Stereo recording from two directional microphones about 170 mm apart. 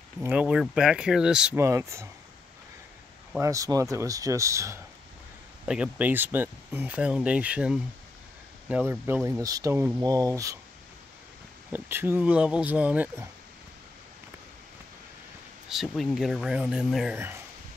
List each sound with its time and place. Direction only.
0.2 s speech: 10° right (ahead or behind)
1.6 s speech: 15° right (ahead or behind)
3.3 s speech: 20° right (ahead or behind)
11.7 s speech: 15° right (ahead or behind)
15.7 s speech: centre (ahead or behind)